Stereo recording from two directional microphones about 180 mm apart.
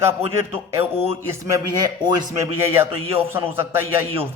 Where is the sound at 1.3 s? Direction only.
20° right (ahead or behind).